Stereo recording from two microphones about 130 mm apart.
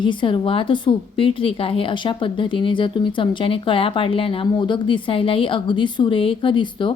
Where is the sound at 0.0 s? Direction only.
40° left (ahead or behind).